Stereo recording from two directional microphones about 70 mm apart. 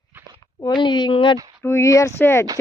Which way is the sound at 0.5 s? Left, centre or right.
Left.